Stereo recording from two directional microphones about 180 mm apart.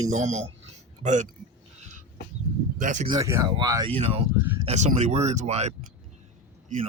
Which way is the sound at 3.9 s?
35° right (ahead or behind).